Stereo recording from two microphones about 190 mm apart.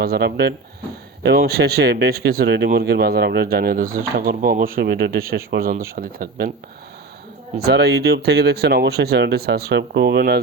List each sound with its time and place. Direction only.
0.0 s speech: 55° right (ahead or behind)
7.5 s speech: 55° right (ahead or behind)